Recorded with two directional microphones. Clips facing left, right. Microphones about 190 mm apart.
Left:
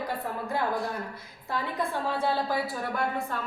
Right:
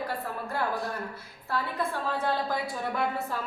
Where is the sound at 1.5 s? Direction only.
10° left (ahead or behind).